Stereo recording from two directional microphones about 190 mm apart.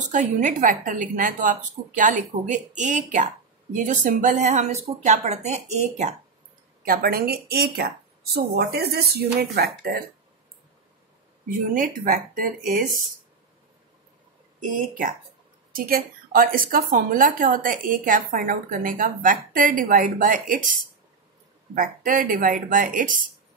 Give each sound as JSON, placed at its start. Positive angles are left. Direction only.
{"t": 0.1, "sound": "a woman's voice", "side_deg": -40}
{"t": 6.8, "sound": "speech", "side_deg": -50}
{"t": 11.4, "sound": "a woman's voice", "side_deg": -45}
{"t": 14.7, "sound": "a woman's voice", "side_deg": -45}
{"t": 21.7, "sound": "a woman's voice", "side_deg": -45}